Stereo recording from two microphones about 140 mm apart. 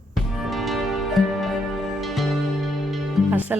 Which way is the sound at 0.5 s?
Centre (ahead or behind).